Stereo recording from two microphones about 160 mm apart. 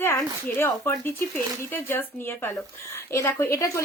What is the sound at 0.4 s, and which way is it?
A woman's voice, 15° left (ahead or behind).